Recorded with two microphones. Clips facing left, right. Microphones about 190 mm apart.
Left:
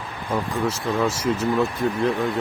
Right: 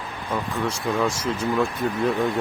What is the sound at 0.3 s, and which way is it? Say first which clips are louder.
Speech: left 2 dB; 10° left (ahead or behind).